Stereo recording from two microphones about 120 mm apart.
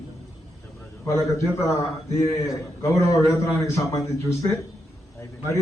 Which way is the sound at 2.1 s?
25° left (ahead or behind).